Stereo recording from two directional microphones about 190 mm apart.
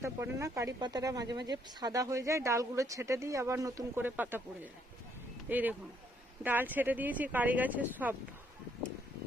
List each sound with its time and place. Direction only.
0.0 s speech: 15° right (ahead or behind)